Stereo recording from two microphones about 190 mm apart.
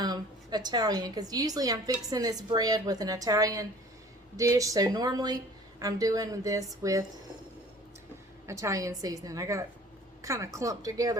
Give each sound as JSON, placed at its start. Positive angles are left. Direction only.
{"t": 0.0, "sound": "a woman's voice", "side_deg": -20}
{"t": 8.4, "sound": "a woman's voice", "side_deg": -15}